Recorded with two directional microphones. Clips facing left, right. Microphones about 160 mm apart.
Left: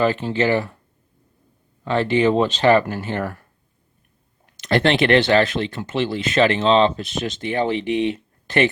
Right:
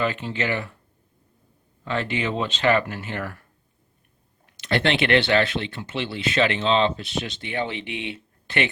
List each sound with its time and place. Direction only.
0.0 s speech: 35° left (ahead or behind)
1.8 s speech: 35° left (ahead or behind)
4.6 s speech: 40° left (ahead or behind)